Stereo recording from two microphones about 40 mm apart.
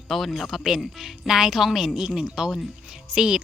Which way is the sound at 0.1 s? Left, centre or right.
Centre.